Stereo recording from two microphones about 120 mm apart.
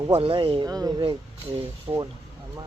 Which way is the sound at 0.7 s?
30° right (ahead or behind).